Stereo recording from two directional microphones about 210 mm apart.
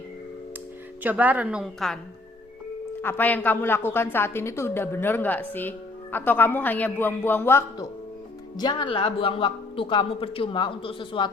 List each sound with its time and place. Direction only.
1.0 s a woman's voice: 10° right (ahead or behind)
3.0 s a woman's voice: 10° left (ahead or behind)